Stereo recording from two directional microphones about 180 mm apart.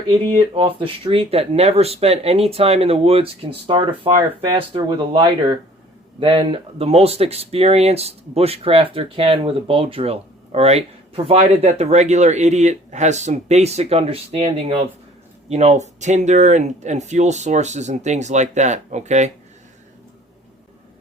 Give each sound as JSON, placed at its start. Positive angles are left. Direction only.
{"t": 0.5, "sound": "speech", "side_deg": -30}